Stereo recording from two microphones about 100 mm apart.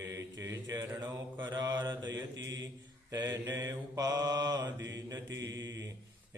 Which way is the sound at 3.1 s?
40° right (ahead or behind).